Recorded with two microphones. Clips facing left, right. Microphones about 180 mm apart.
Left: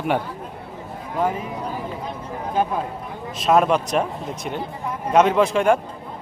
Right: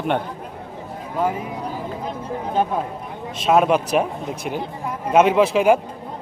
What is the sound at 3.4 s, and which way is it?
Speech, centre (ahead or behind).